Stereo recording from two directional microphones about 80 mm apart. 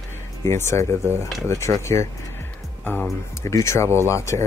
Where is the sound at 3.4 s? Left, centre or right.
Left.